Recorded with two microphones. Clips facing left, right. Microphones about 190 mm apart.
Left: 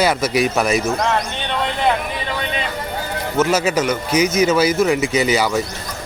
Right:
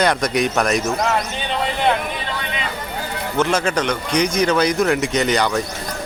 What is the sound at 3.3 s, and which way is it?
Speech, 5° left (ahead or behind).